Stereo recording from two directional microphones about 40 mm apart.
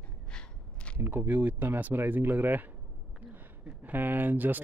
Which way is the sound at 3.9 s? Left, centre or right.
Right.